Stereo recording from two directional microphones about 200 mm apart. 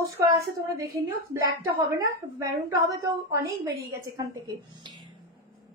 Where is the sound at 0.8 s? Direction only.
15° right (ahead or behind).